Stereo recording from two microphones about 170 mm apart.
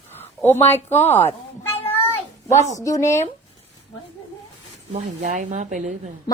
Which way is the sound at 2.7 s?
20° left (ahead or behind).